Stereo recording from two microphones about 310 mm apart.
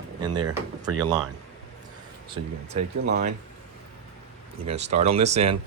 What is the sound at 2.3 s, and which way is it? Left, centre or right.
Speech, right.